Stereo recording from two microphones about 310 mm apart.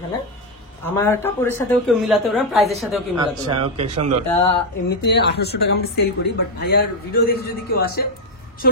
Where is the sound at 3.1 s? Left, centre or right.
Centre.